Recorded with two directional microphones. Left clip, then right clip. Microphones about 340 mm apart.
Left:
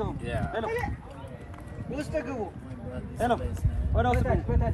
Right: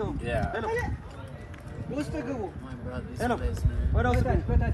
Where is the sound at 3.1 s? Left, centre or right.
Centre.